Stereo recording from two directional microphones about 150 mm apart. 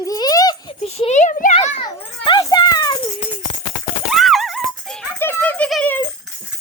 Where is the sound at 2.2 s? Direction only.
30° left (ahead or behind).